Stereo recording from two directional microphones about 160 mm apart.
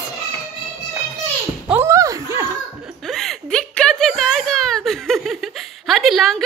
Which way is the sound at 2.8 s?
Centre (ahead or behind).